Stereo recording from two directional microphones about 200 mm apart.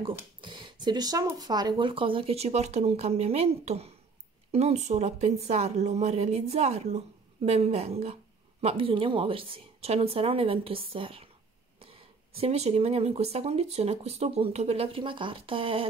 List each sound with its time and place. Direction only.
0.0 s speech: 25° right (ahead or behind)